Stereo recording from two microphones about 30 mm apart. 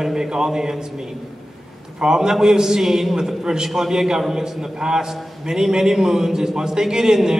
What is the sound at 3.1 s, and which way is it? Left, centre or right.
A man's voice, right.